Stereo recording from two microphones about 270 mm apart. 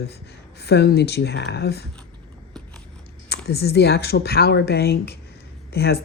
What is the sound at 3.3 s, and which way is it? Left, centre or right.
Speech, left.